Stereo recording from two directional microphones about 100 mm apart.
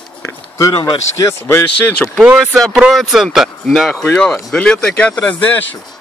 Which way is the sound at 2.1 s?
5° right (ahead or behind).